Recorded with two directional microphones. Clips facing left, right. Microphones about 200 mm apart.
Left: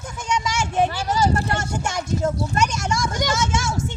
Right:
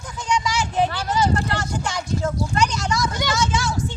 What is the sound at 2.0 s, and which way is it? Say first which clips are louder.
Speech: left 2 dB; 25° left (ahead or behind).